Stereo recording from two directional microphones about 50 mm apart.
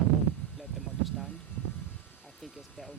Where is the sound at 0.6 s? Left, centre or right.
Centre.